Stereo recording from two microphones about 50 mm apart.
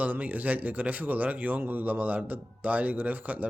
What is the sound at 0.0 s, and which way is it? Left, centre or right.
Speech, right.